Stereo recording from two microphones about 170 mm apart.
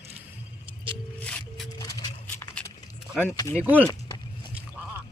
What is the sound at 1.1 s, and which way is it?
Music, 10° left (ahead or behind).